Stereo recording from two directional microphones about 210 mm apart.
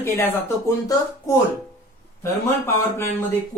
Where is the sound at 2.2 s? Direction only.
10° left (ahead or behind).